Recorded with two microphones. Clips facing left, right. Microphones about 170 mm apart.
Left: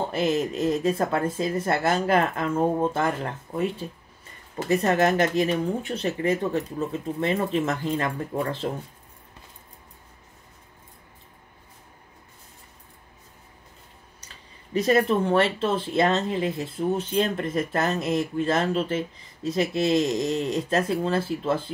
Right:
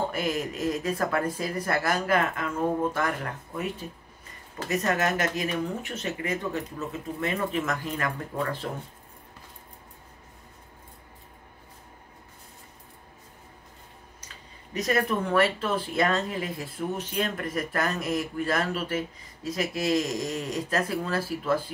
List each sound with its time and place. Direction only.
0.1 s speech: 25° left (ahead or behind)
14.2 s speech: 30° left (ahead or behind)